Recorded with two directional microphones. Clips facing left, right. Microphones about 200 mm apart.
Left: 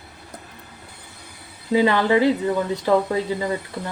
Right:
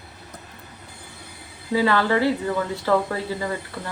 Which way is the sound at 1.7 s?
20° left (ahead or behind).